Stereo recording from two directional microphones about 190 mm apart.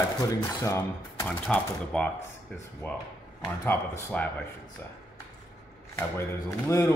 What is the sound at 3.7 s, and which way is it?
Speech, 10° left (ahead or behind).